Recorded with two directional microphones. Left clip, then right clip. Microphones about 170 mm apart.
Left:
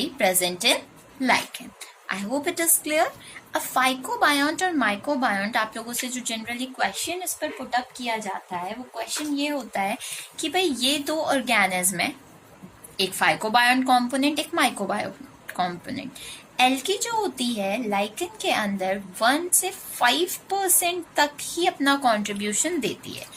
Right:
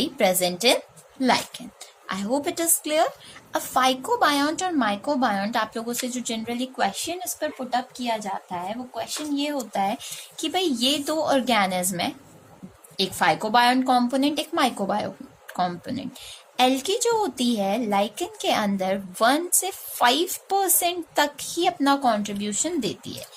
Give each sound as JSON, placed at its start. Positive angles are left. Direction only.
{"t": 0.0, "sound": "a woman's voice", "side_deg": -60}